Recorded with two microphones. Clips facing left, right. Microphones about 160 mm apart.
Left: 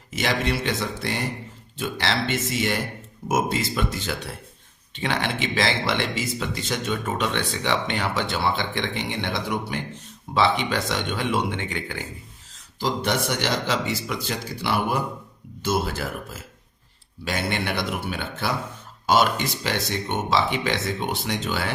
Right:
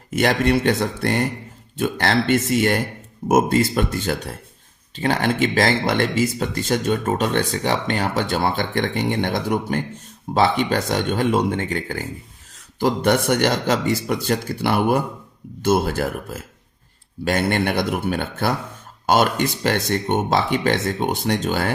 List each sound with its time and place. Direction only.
0.1 s speech: 50° right (ahead or behind)
12.8 s speech: 55° right (ahead or behind)